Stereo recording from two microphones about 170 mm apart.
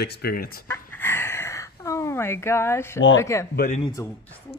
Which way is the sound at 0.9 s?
15° left (ahead or behind).